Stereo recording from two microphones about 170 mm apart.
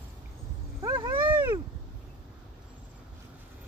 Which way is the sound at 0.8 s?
25° right (ahead or behind).